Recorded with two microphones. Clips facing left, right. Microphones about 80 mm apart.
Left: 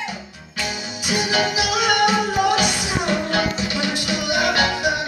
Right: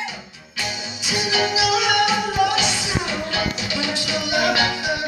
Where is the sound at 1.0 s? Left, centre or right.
Left.